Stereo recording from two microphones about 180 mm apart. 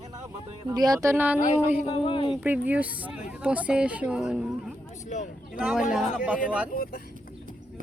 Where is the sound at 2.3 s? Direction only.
10° right (ahead or behind).